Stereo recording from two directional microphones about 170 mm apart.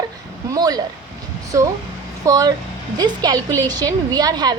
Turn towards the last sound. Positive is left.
turn(degrees=-25)  # may be behind; listen again after turning